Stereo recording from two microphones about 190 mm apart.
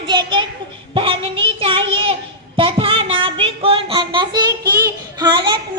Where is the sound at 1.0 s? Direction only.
30° right (ahead or behind).